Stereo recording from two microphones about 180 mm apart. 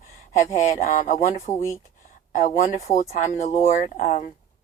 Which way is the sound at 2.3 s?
45° left (ahead or behind).